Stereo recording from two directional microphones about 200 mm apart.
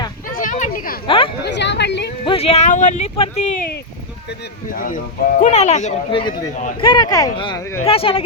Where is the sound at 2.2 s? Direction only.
30° left (ahead or behind).